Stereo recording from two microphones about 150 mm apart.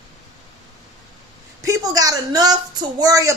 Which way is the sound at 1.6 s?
20° right (ahead or behind).